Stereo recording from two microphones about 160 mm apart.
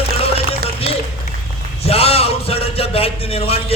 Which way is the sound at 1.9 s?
40° left (ahead or behind).